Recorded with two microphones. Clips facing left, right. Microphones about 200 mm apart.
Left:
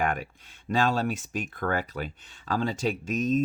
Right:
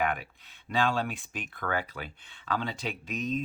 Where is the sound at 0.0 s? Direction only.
45° left (ahead or behind).